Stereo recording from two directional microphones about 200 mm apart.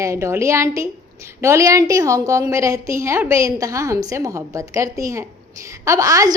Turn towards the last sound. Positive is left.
turn(degrees=-15)  # may be behind; listen again after turning